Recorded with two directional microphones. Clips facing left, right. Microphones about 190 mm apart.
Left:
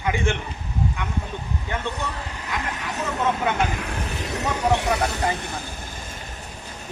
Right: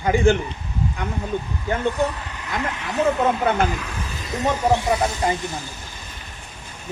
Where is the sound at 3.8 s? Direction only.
60° left (ahead or behind).